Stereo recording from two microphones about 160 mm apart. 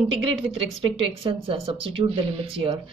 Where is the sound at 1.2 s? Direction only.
35° right (ahead or behind).